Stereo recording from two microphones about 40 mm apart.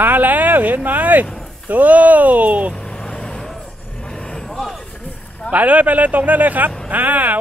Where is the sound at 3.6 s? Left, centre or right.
Left; by 4.8 s centre.